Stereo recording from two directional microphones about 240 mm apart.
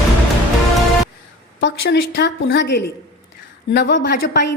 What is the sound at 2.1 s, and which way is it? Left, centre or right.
A woman's voice, left.